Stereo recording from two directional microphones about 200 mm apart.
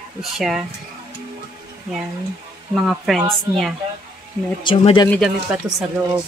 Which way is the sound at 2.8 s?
Centre (ahead or behind).